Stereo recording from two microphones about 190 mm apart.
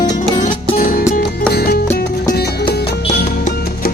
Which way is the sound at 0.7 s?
45° left (ahead or behind).